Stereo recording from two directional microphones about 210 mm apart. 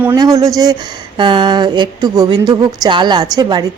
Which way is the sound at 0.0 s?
15° right (ahead or behind).